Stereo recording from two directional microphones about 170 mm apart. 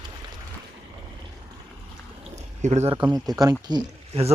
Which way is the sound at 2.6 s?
40° right (ahead or behind).